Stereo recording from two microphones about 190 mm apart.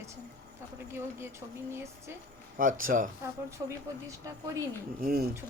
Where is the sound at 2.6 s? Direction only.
45° right (ahead or behind).